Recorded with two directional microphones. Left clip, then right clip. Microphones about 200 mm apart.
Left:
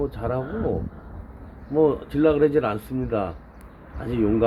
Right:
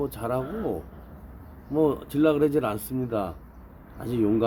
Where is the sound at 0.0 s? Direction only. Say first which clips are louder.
Left 2 dB; 20° right (ahead or behind).